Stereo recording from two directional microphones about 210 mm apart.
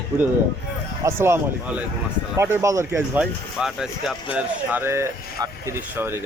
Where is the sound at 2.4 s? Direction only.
15° right (ahead or behind).